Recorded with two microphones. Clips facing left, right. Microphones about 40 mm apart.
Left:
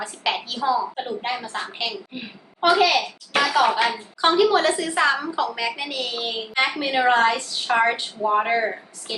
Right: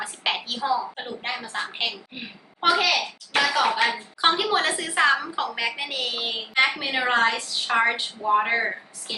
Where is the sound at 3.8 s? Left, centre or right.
Right.